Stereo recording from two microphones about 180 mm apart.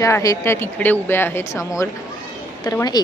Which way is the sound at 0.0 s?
20° left (ahead or behind).